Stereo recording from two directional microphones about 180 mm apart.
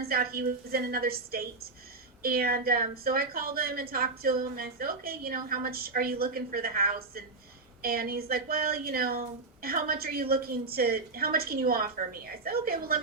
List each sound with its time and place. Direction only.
0.0 s speech: 55° right (ahead or behind)